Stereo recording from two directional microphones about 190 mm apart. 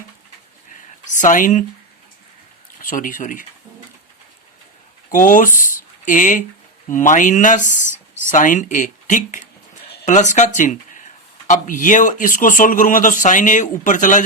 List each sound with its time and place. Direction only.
0.7 s a sound: 40° left (ahead or behind)
2.8 s a man's voice: 45° left (ahead or behind)
5.1 s a man's voice: 45° left (ahead or behind)